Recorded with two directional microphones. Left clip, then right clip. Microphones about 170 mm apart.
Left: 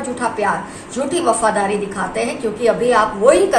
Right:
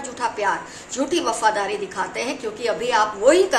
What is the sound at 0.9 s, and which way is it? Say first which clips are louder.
A woman's voice: left 5 dB; 60° right (ahead or behind).